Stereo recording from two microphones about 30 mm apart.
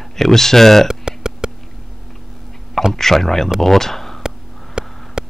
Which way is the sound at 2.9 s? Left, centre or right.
Centre.